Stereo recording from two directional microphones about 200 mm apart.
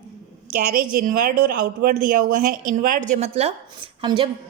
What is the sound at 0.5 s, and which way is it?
A woman's voice, 45° right (ahead or behind).